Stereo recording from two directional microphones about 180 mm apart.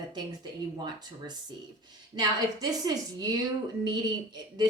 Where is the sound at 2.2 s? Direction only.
20° right (ahead or behind).